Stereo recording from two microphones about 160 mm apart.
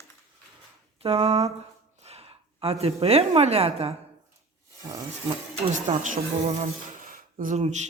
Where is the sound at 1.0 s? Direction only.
35° right (ahead or behind).